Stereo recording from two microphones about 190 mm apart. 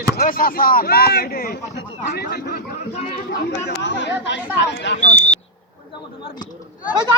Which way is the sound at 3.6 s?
70° left (ahead or behind).